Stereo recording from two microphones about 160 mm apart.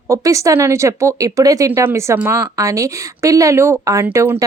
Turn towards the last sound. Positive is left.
turn(degrees=-15)  # may be behind; listen again after turning